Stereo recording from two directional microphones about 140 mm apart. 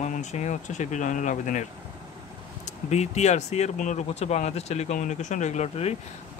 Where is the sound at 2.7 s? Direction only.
55° left (ahead or behind).